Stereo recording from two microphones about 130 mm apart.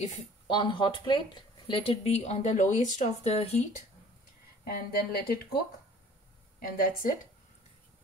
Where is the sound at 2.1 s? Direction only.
55° left (ahead or behind).